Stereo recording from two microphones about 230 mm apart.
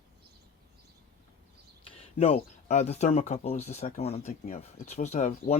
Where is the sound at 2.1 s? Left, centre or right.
Left.